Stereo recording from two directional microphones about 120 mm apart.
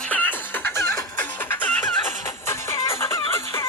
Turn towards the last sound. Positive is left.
turn(degrees=20)  # may be behind; listen again after turning